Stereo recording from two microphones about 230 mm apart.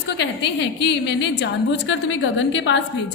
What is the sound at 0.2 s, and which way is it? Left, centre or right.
A woman's voice, left.